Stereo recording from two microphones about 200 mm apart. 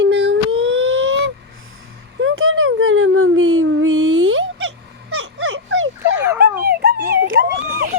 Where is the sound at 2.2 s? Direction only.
85° right.